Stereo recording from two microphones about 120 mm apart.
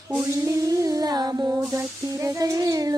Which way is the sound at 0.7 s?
30° right (ahead or behind).